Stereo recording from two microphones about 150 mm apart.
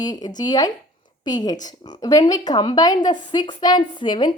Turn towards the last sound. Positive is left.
turn(degrees=30)  # may be behind; listen again after turning